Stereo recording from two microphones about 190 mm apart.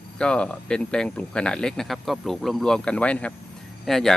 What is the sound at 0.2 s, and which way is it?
Speech, 5° left (ahead or behind).